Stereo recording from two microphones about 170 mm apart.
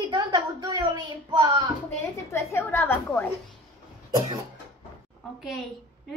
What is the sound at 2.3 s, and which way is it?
Speech, 15° left (ahead or behind).